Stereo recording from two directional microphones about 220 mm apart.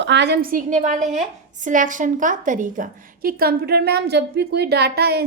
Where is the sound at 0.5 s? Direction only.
35° right (ahead or behind).